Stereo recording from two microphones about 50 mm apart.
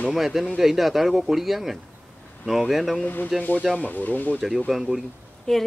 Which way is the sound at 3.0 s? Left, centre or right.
Left.